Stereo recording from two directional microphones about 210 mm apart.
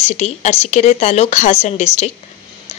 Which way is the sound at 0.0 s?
30° left (ahead or behind).